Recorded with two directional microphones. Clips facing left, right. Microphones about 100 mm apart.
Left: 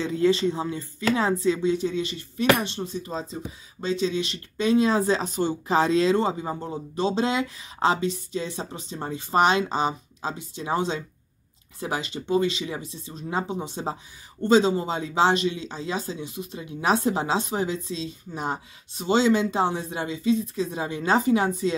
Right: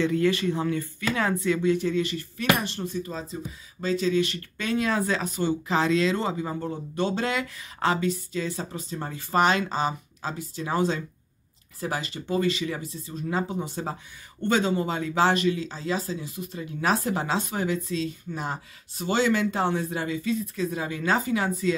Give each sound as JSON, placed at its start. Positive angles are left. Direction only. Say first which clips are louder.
{"t": 0.0, "sound": "speech", "louder": "left 1 dB", "side_deg": 20}